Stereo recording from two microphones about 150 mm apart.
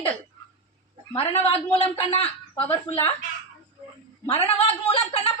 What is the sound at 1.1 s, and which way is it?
A man's voice, 40° left (ahead or behind).